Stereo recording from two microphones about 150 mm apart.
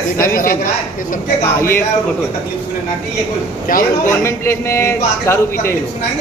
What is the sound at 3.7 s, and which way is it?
Speech, 65° left (ahead or behind).